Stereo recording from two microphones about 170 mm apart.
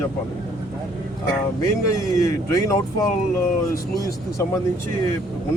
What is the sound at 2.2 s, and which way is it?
Speech, 20° left (ahead or behind).